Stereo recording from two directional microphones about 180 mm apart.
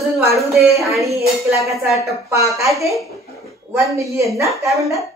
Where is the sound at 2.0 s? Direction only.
15° right (ahead or behind).